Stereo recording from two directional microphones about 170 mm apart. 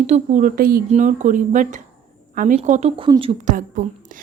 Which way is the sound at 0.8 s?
45° right (ahead or behind).